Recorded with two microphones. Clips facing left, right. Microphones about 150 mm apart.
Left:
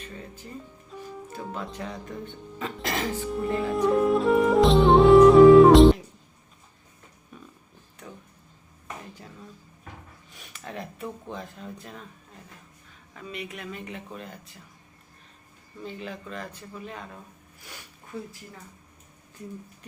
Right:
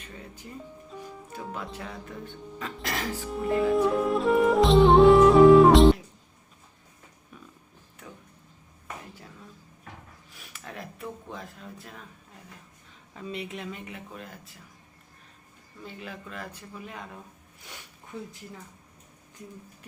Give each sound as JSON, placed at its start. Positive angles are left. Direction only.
{"t": 0.9, "sound": "music", "side_deg": 0}
{"t": 1.4, "sound": "speech", "side_deg": 0}
{"t": 10.3, "sound": "a sound", "side_deg": 0}
{"t": 13.1, "sound": "speech", "side_deg": -25}
{"t": 13.8, "sound": "speech", "side_deg": -5}
{"t": 15.8, "sound": "speech", "side_deg": -5}
{"t": 17.6, "sound": "sniff", "side_deg": -20}